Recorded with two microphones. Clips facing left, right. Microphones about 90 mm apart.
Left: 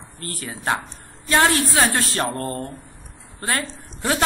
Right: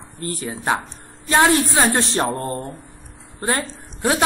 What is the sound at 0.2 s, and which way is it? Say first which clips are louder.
A woman's voice: right 4 dB; 20° right (ahead or behind).